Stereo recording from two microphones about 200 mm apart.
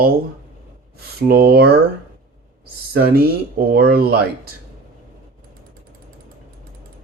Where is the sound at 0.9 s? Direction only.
50° right (ahead or behind).